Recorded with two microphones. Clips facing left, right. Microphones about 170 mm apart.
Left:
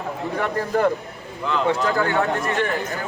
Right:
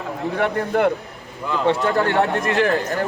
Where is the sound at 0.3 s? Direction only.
65° right (ahead or behind).